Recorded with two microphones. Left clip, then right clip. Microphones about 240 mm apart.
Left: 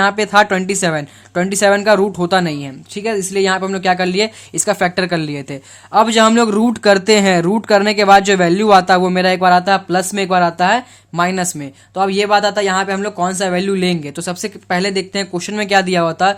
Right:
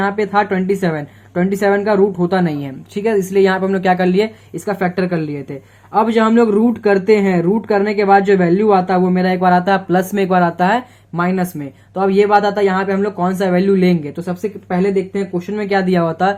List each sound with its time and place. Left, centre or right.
0.0 s speech: left